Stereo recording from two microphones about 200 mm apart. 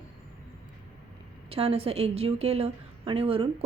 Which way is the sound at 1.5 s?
30° right (ahead or behind).